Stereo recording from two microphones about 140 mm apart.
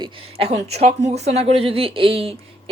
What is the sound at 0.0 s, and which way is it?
A woman's voice, 40° right (ahead or behind).